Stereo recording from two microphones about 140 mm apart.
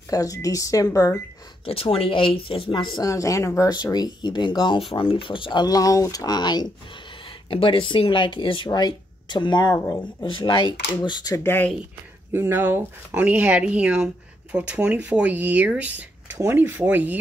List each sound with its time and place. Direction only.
0.1 s speech: 25° left (ahead or behind)
1.7 s speech: 40° left (ahead or behind)
3.0 s speech: 25° left (ahead or behind)
11.4 s speech: 15° left (ahead or behind)
12.3 s speech: 15° right (ahead or behind)